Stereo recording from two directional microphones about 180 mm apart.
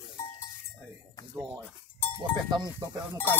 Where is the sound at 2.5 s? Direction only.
25° right (ahead or behind).